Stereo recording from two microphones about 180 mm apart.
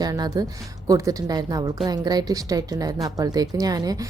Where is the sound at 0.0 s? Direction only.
20° right (ahead or behind).